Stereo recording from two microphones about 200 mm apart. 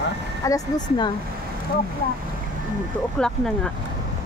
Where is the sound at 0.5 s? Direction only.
20° left (ahead or behind).